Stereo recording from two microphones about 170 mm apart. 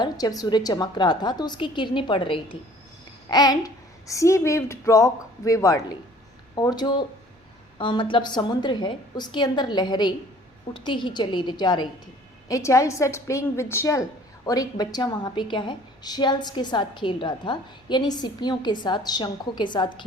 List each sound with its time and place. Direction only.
0.0 s a woman's voice: 20° left (ahead or behind)